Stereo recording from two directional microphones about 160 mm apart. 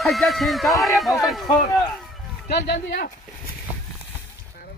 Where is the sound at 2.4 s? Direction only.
85° left.